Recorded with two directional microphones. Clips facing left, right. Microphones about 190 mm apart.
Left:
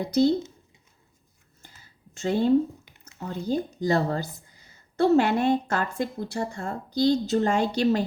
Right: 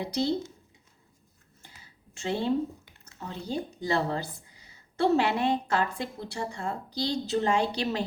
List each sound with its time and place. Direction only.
0.0 s a woman's voice: 45° left (ahead or behind)
2.1 s a woman's voice: 45° left (ahead or behind)
2.8 s a sound: 20° left (ahead or behind)
3.2 s a woman's voice: 45° left (ahead or behind)